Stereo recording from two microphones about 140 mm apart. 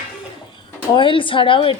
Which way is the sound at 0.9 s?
35° left (ahead or behind).